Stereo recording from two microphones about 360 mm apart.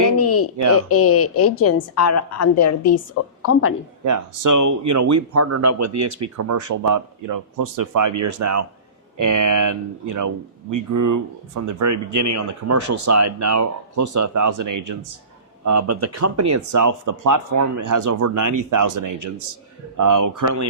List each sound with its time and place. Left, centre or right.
0.2 s a sound: left
0.8 s a woman's voice: left
4.0 s speech: right